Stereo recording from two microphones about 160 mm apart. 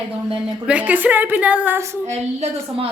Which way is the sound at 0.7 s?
10° right (ahead or behind).